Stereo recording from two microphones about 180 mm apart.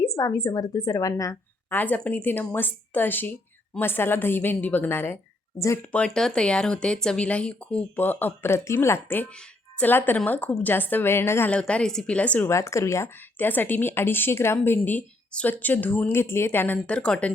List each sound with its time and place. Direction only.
0.0 s a woman's voice: 20° left (ahead or behind)